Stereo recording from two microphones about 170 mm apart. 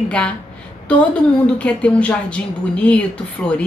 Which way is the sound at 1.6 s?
5° left (ahead or behind).